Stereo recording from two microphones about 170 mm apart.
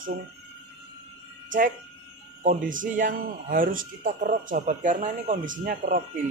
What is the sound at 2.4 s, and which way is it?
Speech, 50° right (ahead or behind).